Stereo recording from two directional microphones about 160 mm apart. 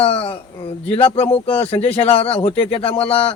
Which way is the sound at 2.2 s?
40° left (ahead or behind).